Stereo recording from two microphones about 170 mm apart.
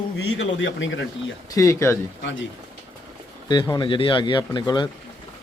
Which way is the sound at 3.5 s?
25° left (ahead or behind).